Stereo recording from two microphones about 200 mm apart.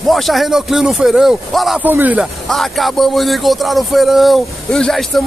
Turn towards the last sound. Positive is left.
turn(degrees=0)  # may be behind; listen again after turning